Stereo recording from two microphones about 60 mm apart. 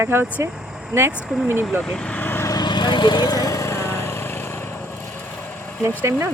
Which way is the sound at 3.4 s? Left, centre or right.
Left.